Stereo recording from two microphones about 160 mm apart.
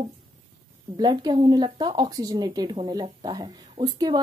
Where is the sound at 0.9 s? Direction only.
25° right (ahead or behind).